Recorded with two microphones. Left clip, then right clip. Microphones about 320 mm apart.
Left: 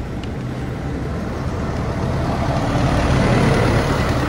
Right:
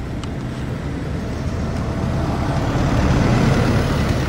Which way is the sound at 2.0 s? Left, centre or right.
Left.